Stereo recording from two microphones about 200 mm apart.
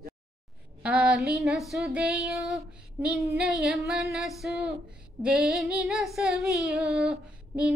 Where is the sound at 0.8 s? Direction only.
5° right (ahead or behind).